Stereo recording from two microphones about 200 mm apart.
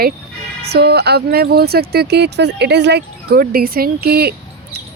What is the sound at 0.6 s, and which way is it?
Speech, 55° right (ahead or behind).